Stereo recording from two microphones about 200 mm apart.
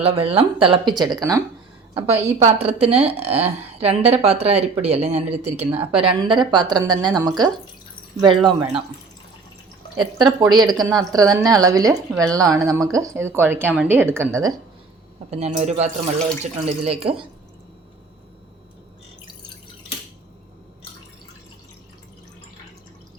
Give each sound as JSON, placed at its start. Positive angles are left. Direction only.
{"t": 0.0, "sound": "a woman's voice", "side_deg": -30}
{"t": 10.0, "sound": "a woman's voice", "side_deg": -20}
{"t": 15.3, "sound": "a woman's voice", "side_deg": -35}